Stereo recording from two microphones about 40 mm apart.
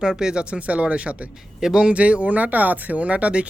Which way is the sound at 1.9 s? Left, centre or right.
Right.